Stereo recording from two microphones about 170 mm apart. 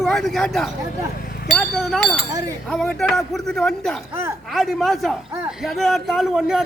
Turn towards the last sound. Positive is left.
turn(degrees=-5)  # may be behind; listen again after turning